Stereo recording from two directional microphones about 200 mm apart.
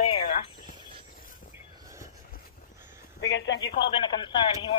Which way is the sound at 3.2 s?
65° left (ahead or behind).